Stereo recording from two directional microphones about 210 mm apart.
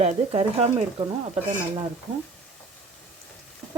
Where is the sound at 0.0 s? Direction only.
30° right (ahead or behind).